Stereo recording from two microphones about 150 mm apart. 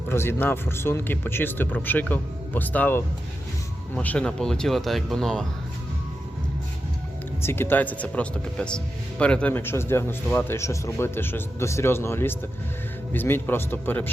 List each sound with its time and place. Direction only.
0.1 s a man's voice: 15° left (ahead or behind)
7.4 s a man's voice: 15° left (ahead or behind)